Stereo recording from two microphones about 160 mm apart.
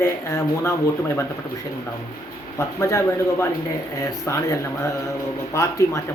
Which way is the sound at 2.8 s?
20° left (ahead or behind).